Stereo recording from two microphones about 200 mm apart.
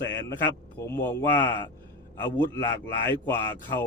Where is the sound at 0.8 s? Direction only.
10° left (ahead or behind).